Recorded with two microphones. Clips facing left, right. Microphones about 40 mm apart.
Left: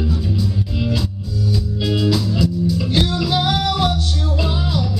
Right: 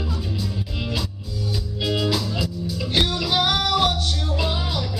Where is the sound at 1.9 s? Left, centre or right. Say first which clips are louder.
Left 4 dB; centre.